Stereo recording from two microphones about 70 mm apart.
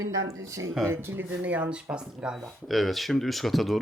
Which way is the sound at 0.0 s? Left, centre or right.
Right.